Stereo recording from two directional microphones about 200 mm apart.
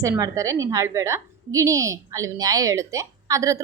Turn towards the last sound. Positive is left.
turn(degrees=-15)  # may be behind; listen again after turning